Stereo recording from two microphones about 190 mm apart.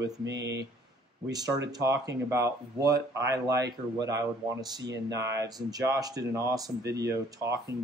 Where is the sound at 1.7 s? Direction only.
20° right (ahead or behind).